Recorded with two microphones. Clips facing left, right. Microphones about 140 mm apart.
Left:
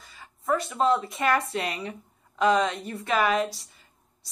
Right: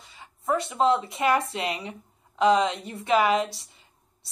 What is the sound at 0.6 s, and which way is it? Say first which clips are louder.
Speech: right 2 dB; 25° right (ahead or behind).